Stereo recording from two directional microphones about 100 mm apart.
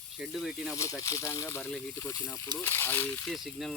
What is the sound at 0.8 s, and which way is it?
Speech, 30° left (ahead or behind).